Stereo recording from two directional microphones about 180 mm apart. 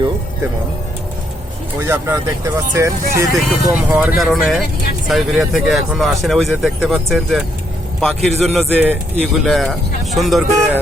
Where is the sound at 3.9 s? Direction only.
Centre (ahead or behind).